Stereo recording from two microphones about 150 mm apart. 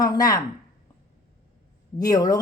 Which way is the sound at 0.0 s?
25° left (ahead or behind).